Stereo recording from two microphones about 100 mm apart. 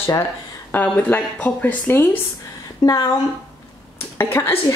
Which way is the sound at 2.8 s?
40° left (ahead or behind).